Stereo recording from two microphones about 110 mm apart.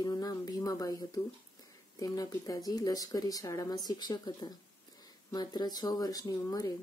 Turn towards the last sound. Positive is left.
turn(degrees=35)  # may be behind; listen again after turning